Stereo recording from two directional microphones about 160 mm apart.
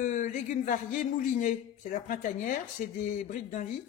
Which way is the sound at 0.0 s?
50° left (ahead or behind).